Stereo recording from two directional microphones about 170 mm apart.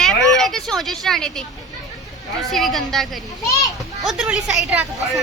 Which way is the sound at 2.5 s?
Centre (ahead or behind).